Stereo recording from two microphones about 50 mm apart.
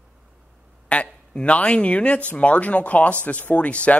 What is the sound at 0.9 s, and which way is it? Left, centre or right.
Speech, left.